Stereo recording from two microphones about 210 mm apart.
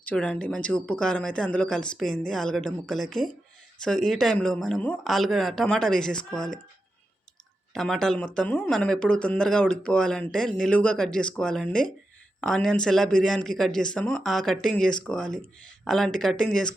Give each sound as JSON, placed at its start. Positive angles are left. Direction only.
{"t": 0.0, "sound": "speech", "side_deg": 5}
{"t": 7.7, "sound": "speech", "side_deg": 0}